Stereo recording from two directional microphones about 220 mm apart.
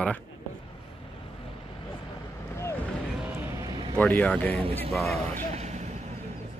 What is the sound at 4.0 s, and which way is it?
Speech, 5° left (ahead or behind).